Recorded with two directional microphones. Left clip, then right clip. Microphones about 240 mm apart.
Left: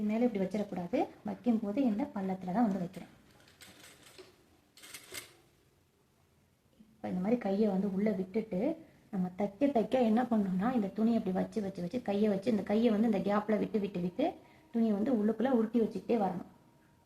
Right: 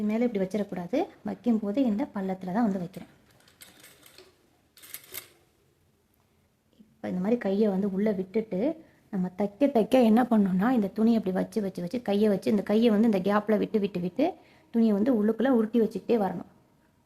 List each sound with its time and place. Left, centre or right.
0.1 s speech: right
7.0 s a woman's voice: right